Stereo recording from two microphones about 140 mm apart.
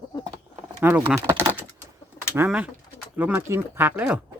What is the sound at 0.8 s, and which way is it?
Speech, 15° right (ahead or behind).